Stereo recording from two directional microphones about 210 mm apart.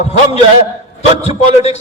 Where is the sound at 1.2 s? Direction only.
30° left (ahead or behind).